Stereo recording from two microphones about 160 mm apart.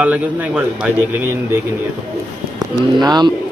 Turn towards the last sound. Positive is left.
turn(degrees=-25)  # may be behind; listen again after turning